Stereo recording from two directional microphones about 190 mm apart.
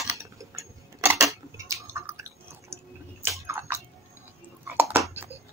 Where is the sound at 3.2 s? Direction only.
15° right (ahead or behind).